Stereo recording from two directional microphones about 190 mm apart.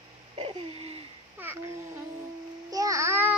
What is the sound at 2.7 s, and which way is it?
Music, 15° right (ahead or behind).